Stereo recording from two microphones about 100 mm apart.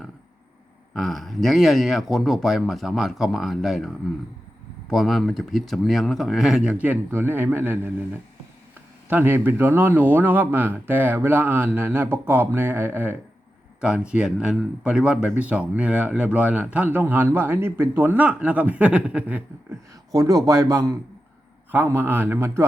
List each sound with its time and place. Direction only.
0.9 s speech: centre (ahead or behind)
6.7 s speech: 15° right (ahead or behind)
9.0 s speech: 20° right (ahead or behind)
13.8 s speech: 10° right (ahead or behind)
20.1 s a man's voice: 35° right (ahead or behind)
21.9 s speech: 20° right (ahead or behind)